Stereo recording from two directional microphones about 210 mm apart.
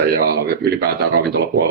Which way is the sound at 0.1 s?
45° right (ahead or behind).